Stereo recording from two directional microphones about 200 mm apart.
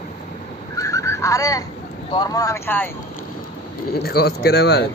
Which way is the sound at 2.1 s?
20° left (ahead or behind).